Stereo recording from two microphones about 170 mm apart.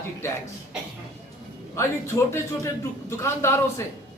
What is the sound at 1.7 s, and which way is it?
A man's voice, 15° left (ahead or behind).